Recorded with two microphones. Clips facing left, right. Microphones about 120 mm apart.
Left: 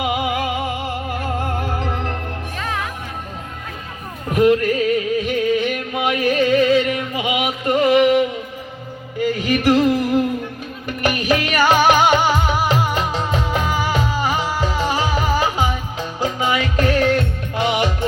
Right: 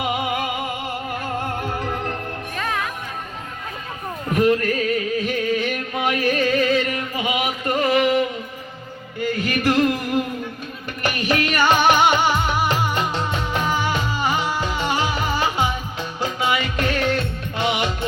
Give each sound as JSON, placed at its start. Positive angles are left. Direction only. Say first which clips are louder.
{"t": 0.0, "sound": "music", "louder": "left 3 dB", "side_deg": 15}
{"t": 4.3, "sound": "music", "louder": "left 3 dB", "side_deg": 20}
{"t": 9.6, "sound": "music", "louder": "left 3 dB", "side_deg": 10}
{"t": 11.0, "sound": "music", "louder": "left 3 dB", "side_deg": 10}